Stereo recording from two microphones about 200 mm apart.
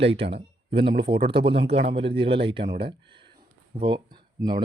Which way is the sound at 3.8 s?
25° right (ahead or behind).